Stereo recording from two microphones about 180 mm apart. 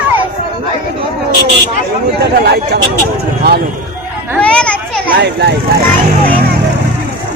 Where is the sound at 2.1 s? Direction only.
65° right (ahead or behind).